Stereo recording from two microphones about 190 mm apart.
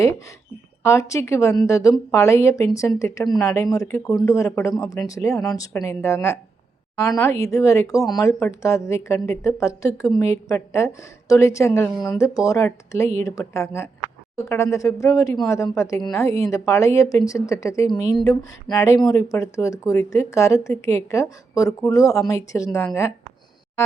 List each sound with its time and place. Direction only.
0.8 s speech: 15° left (ahead or behind)